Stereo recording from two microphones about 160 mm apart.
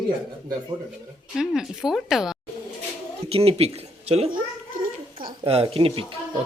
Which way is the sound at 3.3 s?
35° right (ahead or behind).